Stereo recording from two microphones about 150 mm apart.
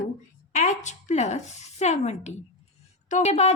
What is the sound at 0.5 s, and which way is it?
A woman's voice, 55° left (ahead or behind).